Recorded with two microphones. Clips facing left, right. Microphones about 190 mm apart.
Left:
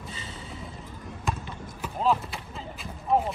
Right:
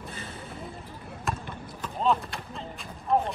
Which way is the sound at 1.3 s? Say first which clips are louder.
Left 1 dB; centre (ahead or behind).